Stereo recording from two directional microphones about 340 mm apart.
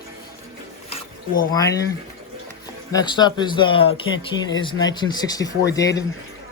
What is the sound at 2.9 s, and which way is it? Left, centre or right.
Speech, centre.